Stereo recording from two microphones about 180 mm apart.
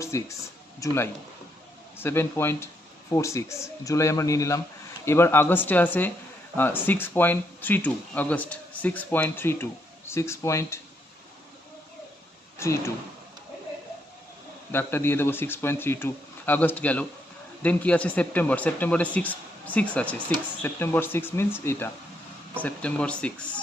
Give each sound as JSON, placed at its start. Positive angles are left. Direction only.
{"t": 0.0, "sound": "speech", "side_deg": 15}
{"t": 12.5, "sound": "speech", "side_deg": 15}
{"t": 14.7, "sound": "speech", "side_deg": 10}